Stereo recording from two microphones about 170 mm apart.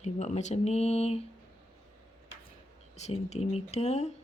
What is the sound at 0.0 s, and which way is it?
Speech, 40° left (ahead or behind).